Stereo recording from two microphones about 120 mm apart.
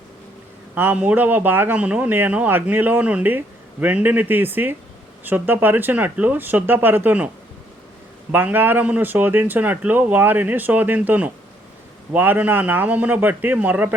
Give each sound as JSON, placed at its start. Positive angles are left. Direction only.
{"t": 0.8, "sound": "speech", "side_deg": -15}
{"t": 8.3, "sound": "speech", "side_deg": -15}